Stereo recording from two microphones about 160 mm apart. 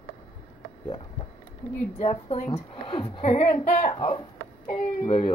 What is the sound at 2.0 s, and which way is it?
A woman's voice, 40° left (ahead or behind).